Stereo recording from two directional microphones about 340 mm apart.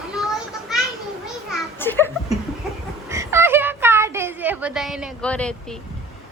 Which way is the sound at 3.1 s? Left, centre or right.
Centre.